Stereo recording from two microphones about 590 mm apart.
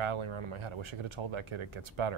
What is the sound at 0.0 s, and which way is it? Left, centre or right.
Speech, right.